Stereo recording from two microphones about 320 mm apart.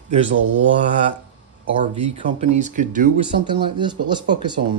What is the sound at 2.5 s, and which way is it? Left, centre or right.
Speech, right.